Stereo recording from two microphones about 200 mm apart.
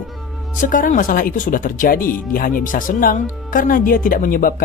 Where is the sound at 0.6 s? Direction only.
40° left (ahead or behind).